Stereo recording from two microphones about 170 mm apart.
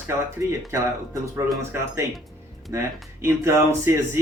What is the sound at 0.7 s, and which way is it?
A man's voice, 20° right (ahead or behind).